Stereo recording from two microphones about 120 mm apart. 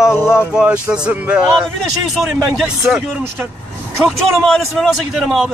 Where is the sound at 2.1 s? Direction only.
Centre (ahead or behind).